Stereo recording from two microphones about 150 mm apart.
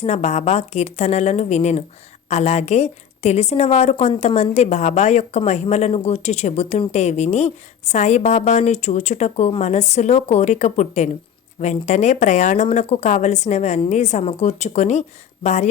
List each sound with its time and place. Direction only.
0.0 s speech: 45° left (ahead or behind)